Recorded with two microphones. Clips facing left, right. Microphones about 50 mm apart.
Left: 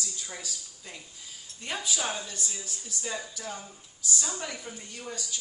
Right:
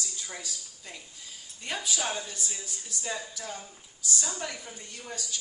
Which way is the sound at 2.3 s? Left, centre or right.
Centre.